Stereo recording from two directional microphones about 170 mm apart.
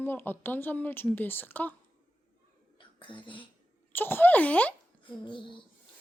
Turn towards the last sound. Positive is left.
turn(degrees=30)  # may be behind; listen again after turning